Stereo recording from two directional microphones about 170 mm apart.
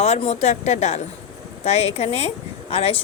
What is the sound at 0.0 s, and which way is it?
A woman's voice, 40° left (ahead or behind).